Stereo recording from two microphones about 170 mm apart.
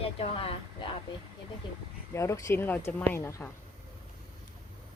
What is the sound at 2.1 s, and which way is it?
Speech, 15° left (ahead or behind).